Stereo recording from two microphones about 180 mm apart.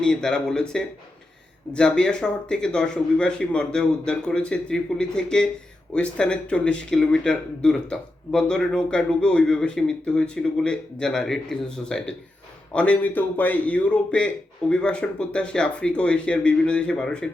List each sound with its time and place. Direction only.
0.0 s a man's voice: 5° left (ahead or behind)